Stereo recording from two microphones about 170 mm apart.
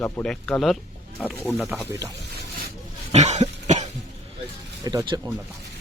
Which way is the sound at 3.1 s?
40° right (ahead or behind).